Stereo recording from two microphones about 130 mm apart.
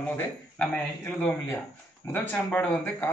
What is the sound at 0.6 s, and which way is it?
Speech, 10° left (ahead or behind).